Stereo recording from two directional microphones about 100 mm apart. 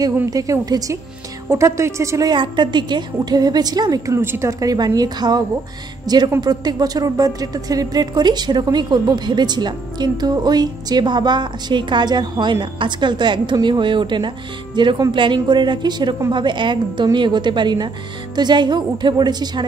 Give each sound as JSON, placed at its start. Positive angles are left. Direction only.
{"t": 0.3, "sound": "a woman's voice", "side_deg": -35}
{"t": 2.3, "sound": "a woman's voice", "side_deg": -50}